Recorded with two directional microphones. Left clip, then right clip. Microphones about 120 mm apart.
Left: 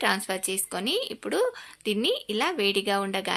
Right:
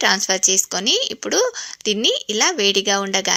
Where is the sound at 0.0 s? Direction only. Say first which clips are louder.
Right 9 dB; 40° right (ahead or behind).